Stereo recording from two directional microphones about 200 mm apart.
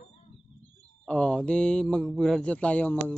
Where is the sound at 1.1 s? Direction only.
5° left (ahead or behind).